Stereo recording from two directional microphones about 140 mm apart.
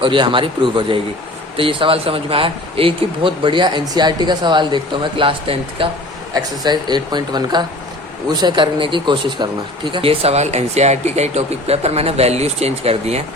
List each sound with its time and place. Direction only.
0.0 s speech: 35° right (ahead or behind)